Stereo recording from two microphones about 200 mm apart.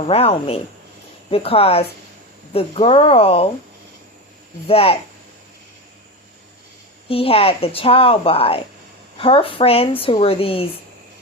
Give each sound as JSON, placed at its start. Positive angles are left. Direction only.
{"t": 0.1, "sound": "a woman's voice", "side_deg": 30}
{"t": 4.7, "sound": "a woman's voice", "side_deg": 30}
{"t": 7.1, "sound": "a woman's voice", "side_deg": 30}